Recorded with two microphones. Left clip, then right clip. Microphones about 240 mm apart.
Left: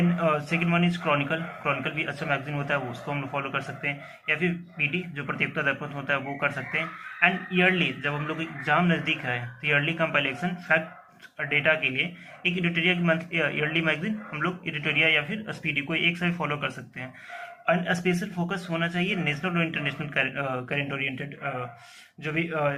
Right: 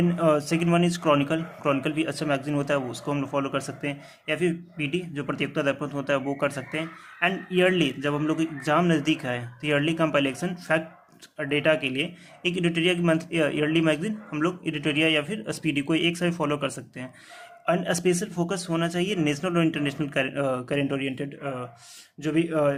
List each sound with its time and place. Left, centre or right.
0.2 s a man's voice: right